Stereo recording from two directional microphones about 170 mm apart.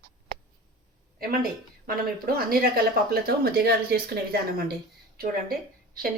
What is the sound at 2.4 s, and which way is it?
A woman's voice, 65° right (ahead or behind).